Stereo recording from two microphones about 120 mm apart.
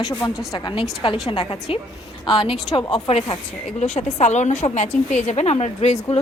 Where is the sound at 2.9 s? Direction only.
55° left (ahead or behind).